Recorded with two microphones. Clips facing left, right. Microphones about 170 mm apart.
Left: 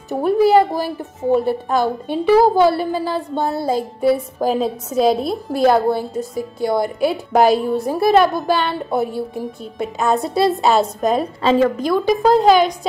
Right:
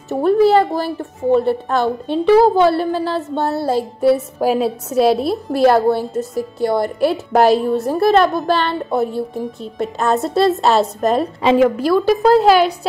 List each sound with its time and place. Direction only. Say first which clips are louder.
0.2 s a woman's voice: right 1 dB; 15° left (ahead or behind)
11.4 s a woman's voice: right 2 dB; 15° right (ahead or behind)